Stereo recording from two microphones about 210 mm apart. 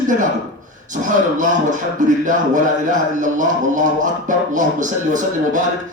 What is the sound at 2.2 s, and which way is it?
A man's voice, 40° right (ahead or behind).